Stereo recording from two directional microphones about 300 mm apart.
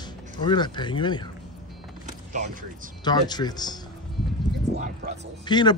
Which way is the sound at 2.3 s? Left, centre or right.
Right.